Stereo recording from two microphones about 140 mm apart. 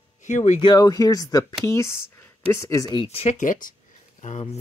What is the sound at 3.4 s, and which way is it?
Speech, 70° left (ahead or behind).